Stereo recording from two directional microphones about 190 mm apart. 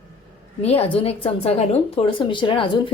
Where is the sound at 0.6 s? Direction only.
30° left (ahead or behind).